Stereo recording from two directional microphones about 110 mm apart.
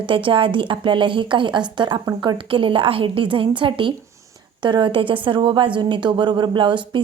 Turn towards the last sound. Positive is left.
turn(degrees=-45)  # may be behind; listen again after turning